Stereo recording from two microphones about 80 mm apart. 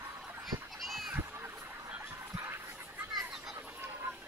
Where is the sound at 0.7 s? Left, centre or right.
Centre.